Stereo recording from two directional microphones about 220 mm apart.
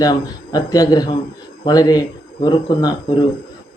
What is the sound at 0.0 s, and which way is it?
Speech, 15° left (ahead or behind).